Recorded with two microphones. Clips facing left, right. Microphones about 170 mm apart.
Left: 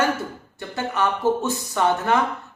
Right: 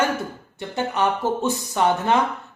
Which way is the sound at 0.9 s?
15° right (ahead or behind).